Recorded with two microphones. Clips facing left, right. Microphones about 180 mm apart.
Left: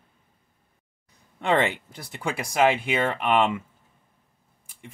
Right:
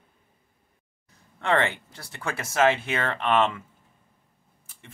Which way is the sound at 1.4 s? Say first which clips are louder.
Left 2 dB; 20° left (ahead or behind).